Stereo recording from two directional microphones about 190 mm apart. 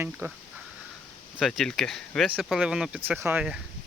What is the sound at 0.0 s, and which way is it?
Speech, 10° right (ahead or behind).